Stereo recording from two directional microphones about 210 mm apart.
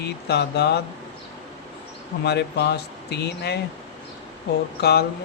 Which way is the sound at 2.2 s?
50° left (ahead or behind).